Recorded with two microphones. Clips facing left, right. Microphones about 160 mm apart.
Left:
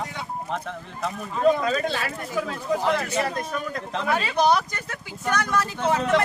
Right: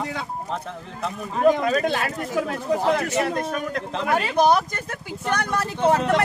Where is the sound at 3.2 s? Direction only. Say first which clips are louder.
Right 3 dB; 60° right (ahead or behind).